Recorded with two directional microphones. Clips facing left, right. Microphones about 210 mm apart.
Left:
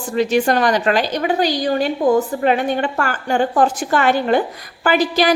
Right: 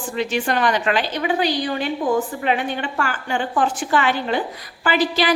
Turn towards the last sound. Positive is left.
turn(degrees=45)  # may be behind; listen again after turning